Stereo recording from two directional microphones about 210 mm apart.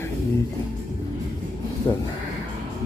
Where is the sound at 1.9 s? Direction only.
25° left (ahead or behind).